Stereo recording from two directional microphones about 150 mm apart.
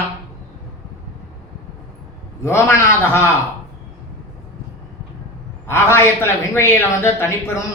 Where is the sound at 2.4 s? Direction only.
15° left (ahead or behind).